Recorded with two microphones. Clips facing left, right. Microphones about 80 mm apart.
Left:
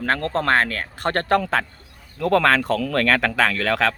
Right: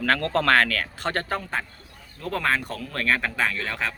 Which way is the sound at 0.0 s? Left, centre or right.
Left.